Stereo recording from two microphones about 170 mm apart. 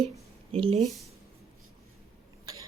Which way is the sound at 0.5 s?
35° right (ahead or behind).